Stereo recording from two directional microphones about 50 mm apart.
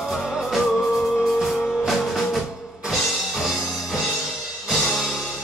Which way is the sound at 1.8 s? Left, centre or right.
Centre.